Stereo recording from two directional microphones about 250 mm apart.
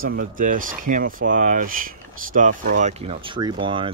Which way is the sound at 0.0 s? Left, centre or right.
Right.